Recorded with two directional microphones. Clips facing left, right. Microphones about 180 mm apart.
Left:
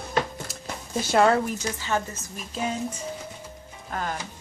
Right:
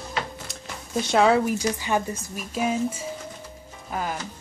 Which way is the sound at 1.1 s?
Centre (ahead or behind).